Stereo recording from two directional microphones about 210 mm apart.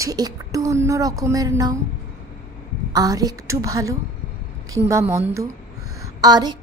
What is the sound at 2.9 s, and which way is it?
A woman's voice, 15° right (ahead or behind).